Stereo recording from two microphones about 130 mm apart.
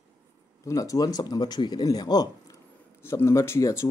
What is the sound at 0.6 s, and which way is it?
Speech, 25° left (ahead or behind).